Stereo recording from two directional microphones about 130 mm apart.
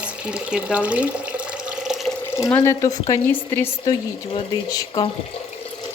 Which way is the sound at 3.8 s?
30° left (ahead or behind).